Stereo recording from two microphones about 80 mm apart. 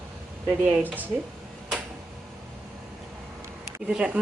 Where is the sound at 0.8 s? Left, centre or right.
Right.